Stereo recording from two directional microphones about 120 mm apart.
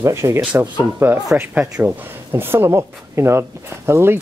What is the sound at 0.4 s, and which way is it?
Speech, 10° right (ahead or behind).